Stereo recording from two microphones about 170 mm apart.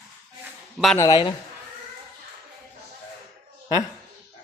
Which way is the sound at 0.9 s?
25° left (ahead or behind).